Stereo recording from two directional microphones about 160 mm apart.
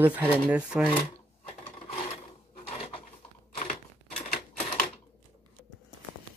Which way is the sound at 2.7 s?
40° left (ahead or behind).